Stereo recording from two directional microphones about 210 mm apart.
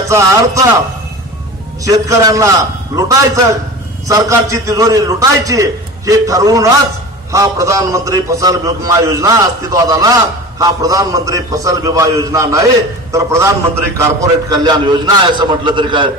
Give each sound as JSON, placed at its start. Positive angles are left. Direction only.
{"t": 0.1, "sound": "a man's voice", "side_deg": -15}
{"t": 1.9, "sound": "a man's voice", "side_deg": -15}
{"t": 4.1, "sound": "a man's voice", "side_deg": -15}